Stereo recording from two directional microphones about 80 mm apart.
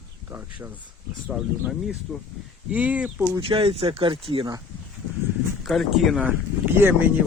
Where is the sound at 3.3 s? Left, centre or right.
Right.